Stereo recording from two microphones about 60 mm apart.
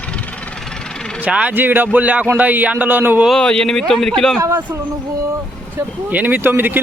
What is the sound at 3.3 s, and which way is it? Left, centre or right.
Speech, centre.